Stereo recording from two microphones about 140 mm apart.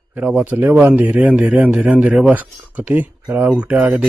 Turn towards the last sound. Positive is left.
turn(degrees=-10)  # may be behind; listen again after turning